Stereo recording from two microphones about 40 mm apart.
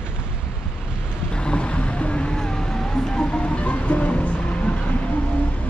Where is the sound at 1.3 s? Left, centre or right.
Left.